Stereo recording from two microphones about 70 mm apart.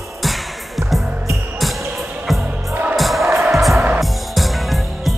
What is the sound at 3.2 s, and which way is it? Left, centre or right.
Music, right.